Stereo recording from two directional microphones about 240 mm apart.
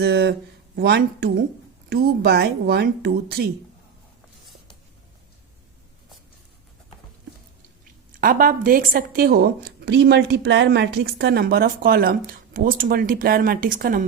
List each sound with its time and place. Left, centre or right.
0.0 s a woman's voice: right
8.1 s a woman's voice: right